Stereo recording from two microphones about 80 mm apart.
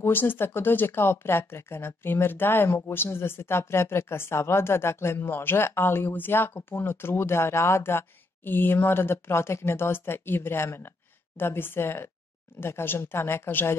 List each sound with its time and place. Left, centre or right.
0.0 s speech: left